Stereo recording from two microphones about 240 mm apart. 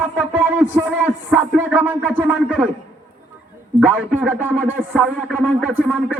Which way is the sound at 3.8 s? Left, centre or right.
Centre.